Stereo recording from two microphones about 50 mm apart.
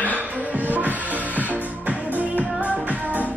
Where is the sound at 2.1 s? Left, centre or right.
Right.